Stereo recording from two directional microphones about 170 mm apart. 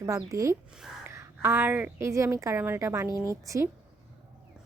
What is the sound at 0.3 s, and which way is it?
Speech, 20° right (ahead or behind).